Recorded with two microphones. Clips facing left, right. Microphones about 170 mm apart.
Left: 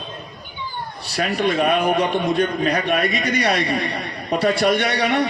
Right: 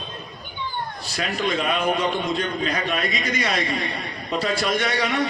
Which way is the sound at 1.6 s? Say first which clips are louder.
Left 5 dB; 60° left (ahead or behind).